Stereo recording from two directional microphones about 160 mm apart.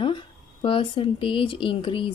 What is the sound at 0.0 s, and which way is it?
Speech, 30° left (ahead or behind).